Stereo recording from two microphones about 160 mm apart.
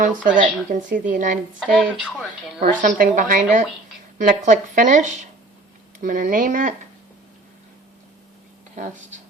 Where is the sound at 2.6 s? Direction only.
60° right (ahead or behind).